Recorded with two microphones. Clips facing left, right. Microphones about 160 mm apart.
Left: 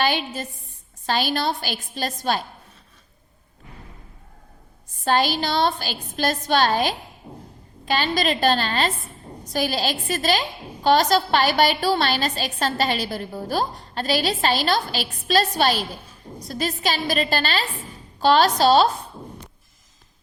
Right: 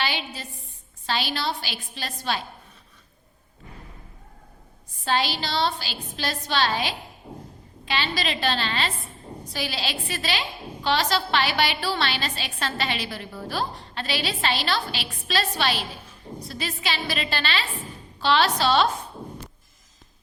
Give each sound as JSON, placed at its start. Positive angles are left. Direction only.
{"t": 0.0, "sound": "a woman's voice", "side_deg": 50}
{"t": 5.0, "sound": "a woman's voice", "side_deg": 45}